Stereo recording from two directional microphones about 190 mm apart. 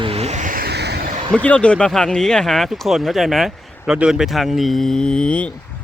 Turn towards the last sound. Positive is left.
turn(degrees=5)  # may be behind; listen again after turning